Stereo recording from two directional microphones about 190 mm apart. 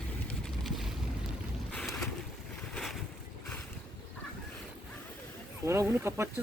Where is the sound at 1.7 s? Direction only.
5° left (ahead or behind).